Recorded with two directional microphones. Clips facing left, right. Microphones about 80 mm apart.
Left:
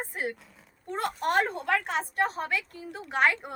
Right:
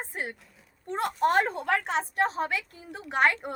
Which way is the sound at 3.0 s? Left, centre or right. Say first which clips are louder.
Right 1 dB; centre.